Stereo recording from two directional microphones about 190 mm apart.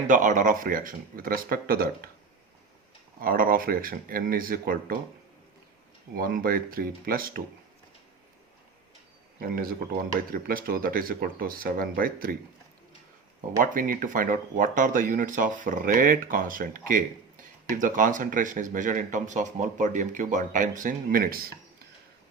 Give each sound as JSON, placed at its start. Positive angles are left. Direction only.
{"t": 0.1, "sound": "speech", "side_deg": -45}
{"t": 3.2, "sound": "speech", "side_deg": -50}
{"t": 6.1, "sound": "speech", "side_deg": -50}
{"t": 9.4, "sound": "speech", "side_deg": -50}
{"t": 13.6, "sound": "speech", "side_deg": -45}